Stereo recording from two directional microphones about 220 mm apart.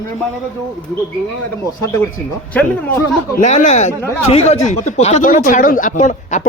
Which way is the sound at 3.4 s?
30° left (ahead or behind).